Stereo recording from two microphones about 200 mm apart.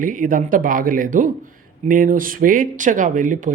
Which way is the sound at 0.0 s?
40° right (ahead or behind).